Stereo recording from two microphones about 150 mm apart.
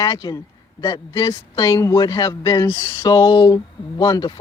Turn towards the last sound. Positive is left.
turn(degrees=25)  # may be behind; listen again after turning